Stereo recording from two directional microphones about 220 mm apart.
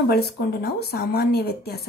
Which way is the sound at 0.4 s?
45° left (ahead or behind).